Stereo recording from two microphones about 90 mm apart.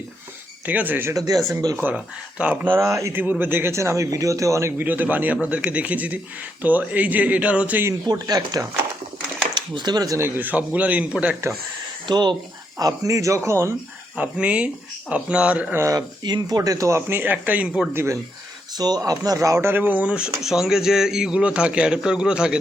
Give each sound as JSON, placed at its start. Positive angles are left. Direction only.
{"t": 0.6, "sound": "speech", "side_deg": -20}
{"t": 1.1, "sound": "speech", "side_deg": -40}
{"t": 2.4, "sound": "a man's voice", "side_deg": -15}
{"t": 4.8, "sound": "a man's voice", "side_deg": -20}
{"t": 8.0, "sound": "speech", "side_deg": -45}
{"t": 10.2, "sound": "a man's voice", "side_deg": -25}
{"t": 12.0, "sound": "speech", "side_deg": -55}
{"t": 12.8, "sound": "speech", "side_deg": -35}
{"t": 14.2, "sound": "a man's voice", "side_deg": -15}
{"t": 15.7, "sound": "speech", "side_deg": -30}
{"t": 16.0, "sound": "speech", "side_deg": -50}
{"t": 17.9, "sound": "speech", "side_deg": -30}
{"t": 18.8, "sound": "a man's voice", "side_deg": -45}